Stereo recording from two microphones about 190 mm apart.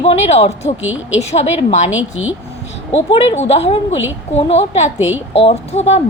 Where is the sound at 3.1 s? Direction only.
35° left (ahead or behind).